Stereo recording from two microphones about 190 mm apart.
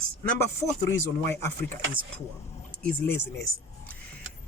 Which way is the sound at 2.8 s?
10° left (ahead or behind).